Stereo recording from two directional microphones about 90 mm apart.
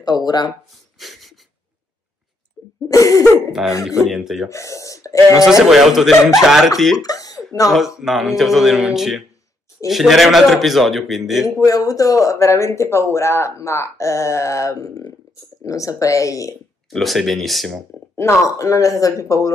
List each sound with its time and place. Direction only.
0.0 s speech: 45° left (ahead or behind)
0.9 s a sound: centre (ahead or behind)
2.9 s speech: 40° left (ahead or behind)
3.8 s speech: 5° right (ahead or behind)
4.5 s gasp: 35° left (ahead or behind)
5.4 s speech: 5° right (ahead or behind)
7.0 s cough: 40° left (ahead or behind)
8.0 s speech: centre (ahead or behind)
11.4 s speech: 40° left (ahead or behind)
16.9 s speech: centre (ahead or behind)
18.1 s speech: 35° left (ahead or behind)